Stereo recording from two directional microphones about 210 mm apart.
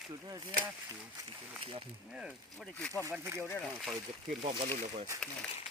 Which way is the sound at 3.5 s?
10° left (ahead or behind).